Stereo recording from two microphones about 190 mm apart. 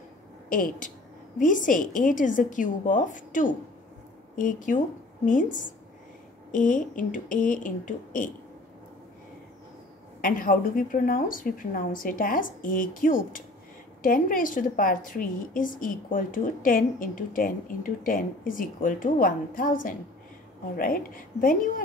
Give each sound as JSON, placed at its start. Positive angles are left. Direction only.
{"t": 0.5, "sound": "a woman's voice", "side_deg": 45}
{"t": 10.2, "sound": "a woman's voice", "side_deg": 45}